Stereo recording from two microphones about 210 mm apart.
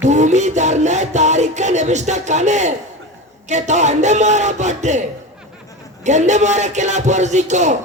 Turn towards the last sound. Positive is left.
turn(degrees=-35)  # may be behind; listen again after turning